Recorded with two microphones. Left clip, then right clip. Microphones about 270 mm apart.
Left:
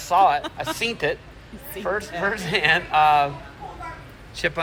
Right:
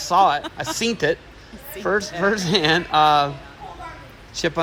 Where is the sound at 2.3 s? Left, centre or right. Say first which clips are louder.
Even; centre.